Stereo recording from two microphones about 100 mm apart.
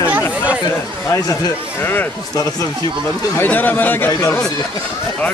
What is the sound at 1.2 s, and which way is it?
Speech, 35° left (ahead or behind).